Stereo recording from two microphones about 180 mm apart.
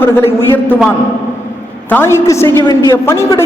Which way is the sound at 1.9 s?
10° left (ahead or behind).